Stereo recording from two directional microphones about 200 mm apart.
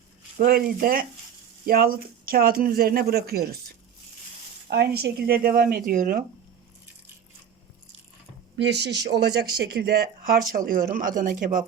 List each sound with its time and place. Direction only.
0.3 s speech: 45° right (ahead or behind)
4.7 s speech: 55° right (ahead or behind)
8.5 s speech: 60° right (ahead or behind); by 11.6 s 40° right (ahead or behind)